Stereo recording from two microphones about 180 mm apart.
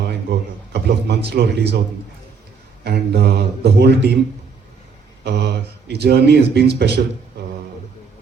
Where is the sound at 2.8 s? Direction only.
60° right (ahead or behind).